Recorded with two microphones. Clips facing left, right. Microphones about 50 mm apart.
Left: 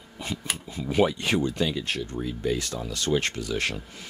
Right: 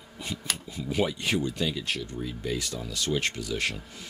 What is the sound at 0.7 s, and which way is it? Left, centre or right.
Speech, left.